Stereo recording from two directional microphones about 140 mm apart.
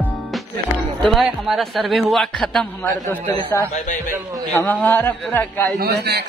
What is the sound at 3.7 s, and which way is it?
Speech, 65° left (ahead or behind).